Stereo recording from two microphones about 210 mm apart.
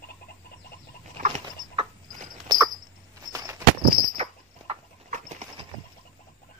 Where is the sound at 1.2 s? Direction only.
25° right (ahead or behind).